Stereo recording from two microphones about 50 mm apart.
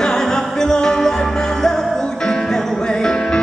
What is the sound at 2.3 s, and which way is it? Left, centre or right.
Music, centre.